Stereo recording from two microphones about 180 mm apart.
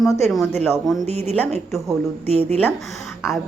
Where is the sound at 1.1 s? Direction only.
35° right (ahead or behind).